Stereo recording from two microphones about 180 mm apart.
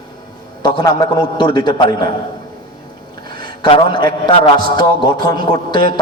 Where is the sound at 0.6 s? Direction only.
25° left (ahead or behind).